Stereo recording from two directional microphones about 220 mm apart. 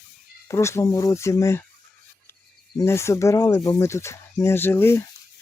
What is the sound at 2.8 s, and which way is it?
Speech, 10° left (ahead or behind).